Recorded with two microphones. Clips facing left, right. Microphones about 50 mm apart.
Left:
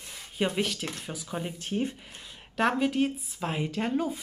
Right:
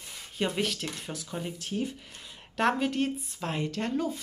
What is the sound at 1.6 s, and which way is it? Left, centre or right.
Speech, left.